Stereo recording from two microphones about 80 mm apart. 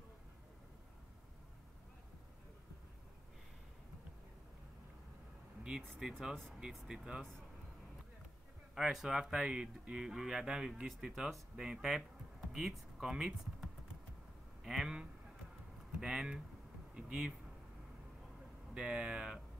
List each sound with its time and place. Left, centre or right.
5.6 s vehicle: centre
5.9 s speech: centre
6.3 s speech: centre
6.6 s speech: centre
8.7 s speech: centre
18.8 s speech: centre